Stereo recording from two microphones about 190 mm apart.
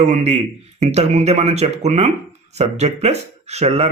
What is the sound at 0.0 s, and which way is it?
Speech, 35° right (ahead or behind).